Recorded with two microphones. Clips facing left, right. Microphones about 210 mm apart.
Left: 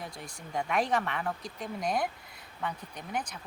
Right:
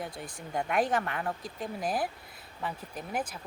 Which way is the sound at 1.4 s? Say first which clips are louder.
Even; 5° right (ahead or behind).